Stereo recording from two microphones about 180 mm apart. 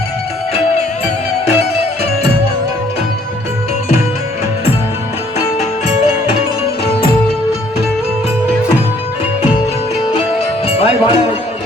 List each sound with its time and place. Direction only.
10.7 s music: 30° left (ahead or behind)